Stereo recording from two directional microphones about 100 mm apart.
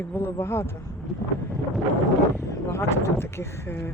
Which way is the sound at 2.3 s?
25° left (ahead or behind).